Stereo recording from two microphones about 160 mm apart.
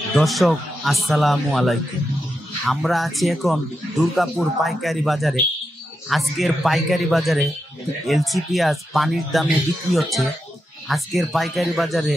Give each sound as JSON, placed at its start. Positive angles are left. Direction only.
{"t": 0.1, "sound": "speech", "side_deg": 0}